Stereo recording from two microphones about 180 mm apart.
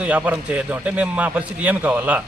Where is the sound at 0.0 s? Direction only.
10° right (ahead or behind).